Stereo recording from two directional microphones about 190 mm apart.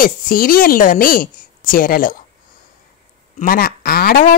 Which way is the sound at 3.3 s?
50° left (ahead or behind).